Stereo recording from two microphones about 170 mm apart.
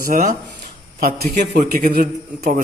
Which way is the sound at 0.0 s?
50° right (ahead or behind).